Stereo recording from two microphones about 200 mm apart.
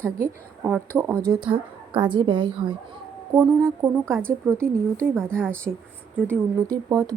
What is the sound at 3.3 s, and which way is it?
Speech, 10° right (ahead or behind).